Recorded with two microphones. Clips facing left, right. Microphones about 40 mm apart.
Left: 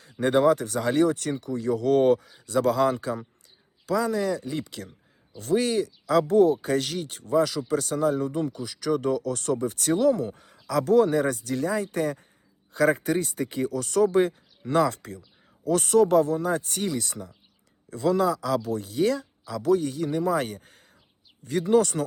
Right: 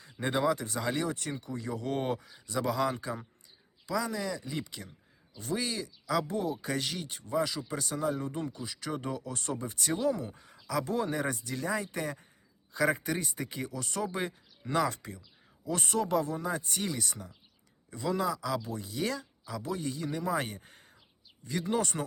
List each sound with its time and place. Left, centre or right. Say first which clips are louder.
0.2 s speech: left 9 dB; left
4.0 s speech: left 9 dB; left
4.6 s speech: left 6 dB; left
22.0 s speech: left 7 dB; centre